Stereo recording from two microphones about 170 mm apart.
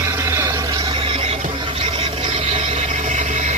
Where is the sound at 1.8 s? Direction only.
30° right (ahead or behind).